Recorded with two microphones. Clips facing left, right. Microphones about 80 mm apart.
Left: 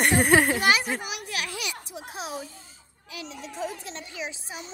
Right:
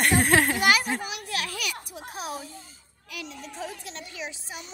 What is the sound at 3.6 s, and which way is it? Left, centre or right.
A woman's voice, left.